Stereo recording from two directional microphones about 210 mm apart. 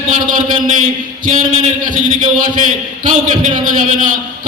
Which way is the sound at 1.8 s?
40° right (ahead or behind).